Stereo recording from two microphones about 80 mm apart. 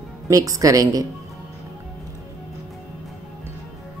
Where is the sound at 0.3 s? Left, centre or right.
Right.